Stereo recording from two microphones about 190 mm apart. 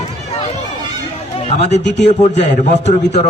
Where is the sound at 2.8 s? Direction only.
35° left (ahead or behind).